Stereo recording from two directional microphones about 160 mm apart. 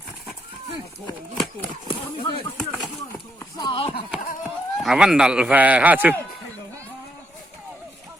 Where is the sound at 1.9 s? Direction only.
30° left (ahead or behind).